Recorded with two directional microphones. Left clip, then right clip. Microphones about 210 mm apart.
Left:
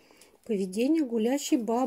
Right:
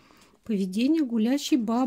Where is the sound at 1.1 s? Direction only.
35° right (ahead or behind).